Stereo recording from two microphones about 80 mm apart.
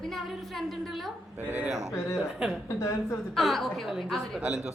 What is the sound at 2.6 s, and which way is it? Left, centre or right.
Speech, left.